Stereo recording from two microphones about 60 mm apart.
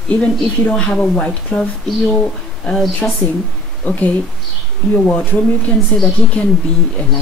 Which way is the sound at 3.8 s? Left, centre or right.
Left.